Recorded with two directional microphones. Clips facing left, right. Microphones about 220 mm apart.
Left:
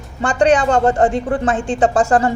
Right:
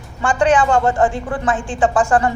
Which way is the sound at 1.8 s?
40° left (ahead or behind).